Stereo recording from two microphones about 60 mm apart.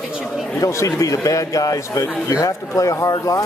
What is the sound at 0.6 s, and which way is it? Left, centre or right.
A man's voice, left.